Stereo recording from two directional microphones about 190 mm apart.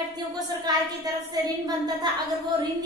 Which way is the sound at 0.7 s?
20° right (ahead or behind).